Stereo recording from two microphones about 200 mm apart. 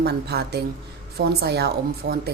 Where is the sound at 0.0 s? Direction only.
50° right (ahead or behind).